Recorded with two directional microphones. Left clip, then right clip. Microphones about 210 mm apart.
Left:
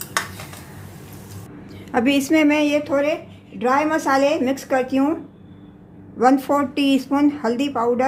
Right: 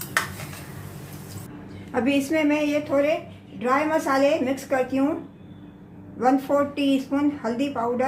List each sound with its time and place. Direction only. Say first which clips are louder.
1.9 s a woman's voice: left 5 dB; 40° left (ahead or behind)
6.1 s a woman's voice: left 4 dB; 50° left (ahead or behind)